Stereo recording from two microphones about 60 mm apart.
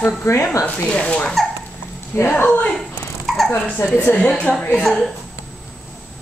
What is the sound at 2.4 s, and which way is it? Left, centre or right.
Speech, centre.